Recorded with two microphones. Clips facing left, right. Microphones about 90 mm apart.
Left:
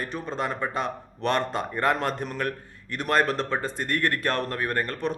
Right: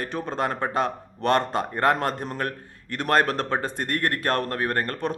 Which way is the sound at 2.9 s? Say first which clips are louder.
Right 2 dB; 50° right (ahead or behind).